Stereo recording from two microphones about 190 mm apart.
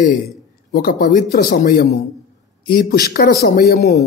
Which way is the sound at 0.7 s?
50° left (ahead or behind).